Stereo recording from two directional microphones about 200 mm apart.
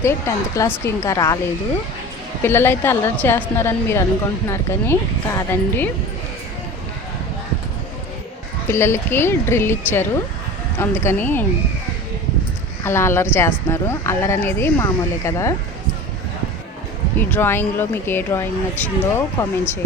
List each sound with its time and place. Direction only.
0.5 s speech: 15° left (ahead or behind)
2.4 s speech: 10° left (ahead or behind)
8.6 s speech: 10° left (ahead or behind)
12.8 s a woman's voice: 10° left (ahead or behind)
17.2 s speech: 10° left (ahead or behind)